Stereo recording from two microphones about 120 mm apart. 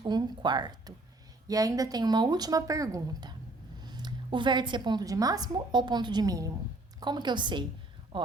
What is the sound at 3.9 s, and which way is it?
A woman's voice, 40° right (ahead or behind).